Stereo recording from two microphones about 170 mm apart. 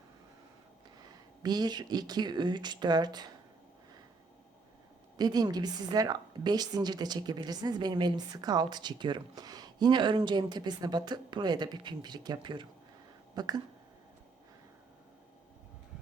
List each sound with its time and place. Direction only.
1.4 s a woman's voice: 25° right (ahead or behind)
5.1 s a woman's voice: 25° right (ahead or behind)